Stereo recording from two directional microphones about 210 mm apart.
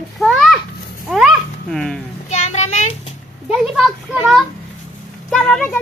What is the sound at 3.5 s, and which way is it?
Speech, 5° right (ahead or behind).